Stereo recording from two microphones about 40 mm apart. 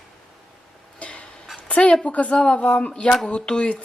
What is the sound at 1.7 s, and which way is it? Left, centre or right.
Speech, left.